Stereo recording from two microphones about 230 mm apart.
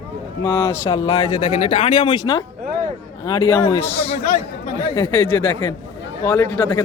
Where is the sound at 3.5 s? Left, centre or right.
Centre.